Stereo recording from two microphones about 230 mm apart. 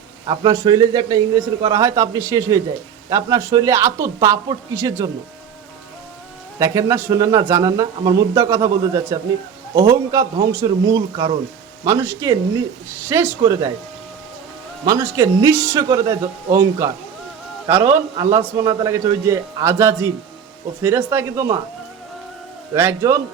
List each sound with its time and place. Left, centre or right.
0.3 s speech: centre
6.6 s speech: centre
14.8 s speech: centre
17.9 s speech: centre
22.7 s speech: centre